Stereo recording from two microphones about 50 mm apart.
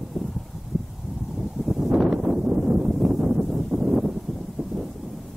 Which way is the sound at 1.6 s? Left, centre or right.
Centre.